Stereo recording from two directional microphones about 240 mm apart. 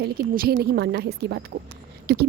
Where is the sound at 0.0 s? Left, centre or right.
Right.